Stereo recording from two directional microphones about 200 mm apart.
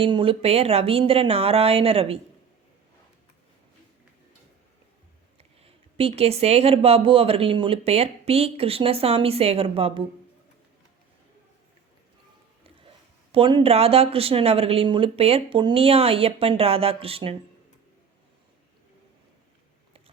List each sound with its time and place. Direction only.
0.0 s speech: 25° right (ahead or behind)
5.4 s speech: 30° right (ahead or behind)
13.3 s speech: 25° right (ahead or behind)